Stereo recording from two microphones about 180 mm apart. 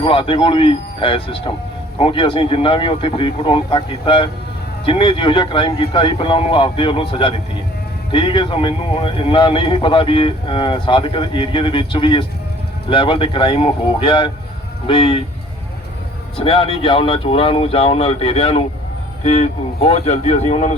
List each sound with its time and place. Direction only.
0.0 s speech: 30° left (ahead or behind)
16.4 s speech: 30° left (ahead or behind)